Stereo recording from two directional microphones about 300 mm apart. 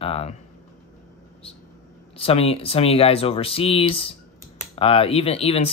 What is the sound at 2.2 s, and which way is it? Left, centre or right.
Speech, centre.